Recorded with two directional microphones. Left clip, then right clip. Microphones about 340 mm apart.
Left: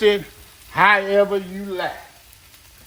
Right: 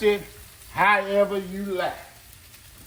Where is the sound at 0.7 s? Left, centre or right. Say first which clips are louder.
Left 5 dB; left.